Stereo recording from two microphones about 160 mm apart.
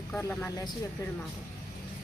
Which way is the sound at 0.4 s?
25° left (ahead or behind).